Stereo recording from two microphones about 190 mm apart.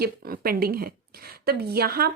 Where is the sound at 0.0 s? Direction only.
50° right (ahead or behind).